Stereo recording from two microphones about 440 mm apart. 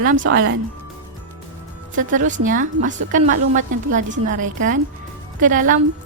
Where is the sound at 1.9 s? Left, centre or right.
Centre.